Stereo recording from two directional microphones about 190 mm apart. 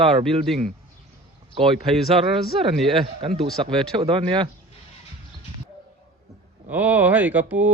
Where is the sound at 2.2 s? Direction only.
30° right (ahead or behind).